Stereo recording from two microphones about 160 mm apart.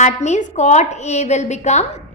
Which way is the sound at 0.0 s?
45° left (ahead or behind).